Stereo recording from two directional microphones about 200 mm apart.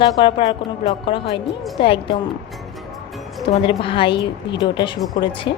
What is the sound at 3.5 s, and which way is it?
A woman's voice, 25° left (ahead or behind).